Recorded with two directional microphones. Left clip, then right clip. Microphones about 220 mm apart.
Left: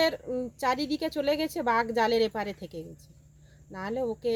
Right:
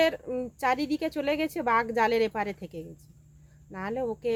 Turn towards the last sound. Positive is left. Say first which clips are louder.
# even
turn(degrees=0)  # may be behind; listen again after turning